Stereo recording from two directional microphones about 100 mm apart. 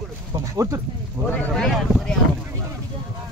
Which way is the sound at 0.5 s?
30° right (ahead or behind).